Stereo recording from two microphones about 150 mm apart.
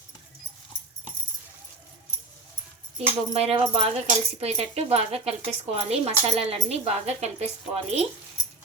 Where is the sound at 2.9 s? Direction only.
40° right (ahead or behind).